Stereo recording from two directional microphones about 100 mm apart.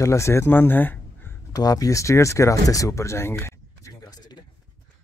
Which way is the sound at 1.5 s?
40° left (ahead or behind).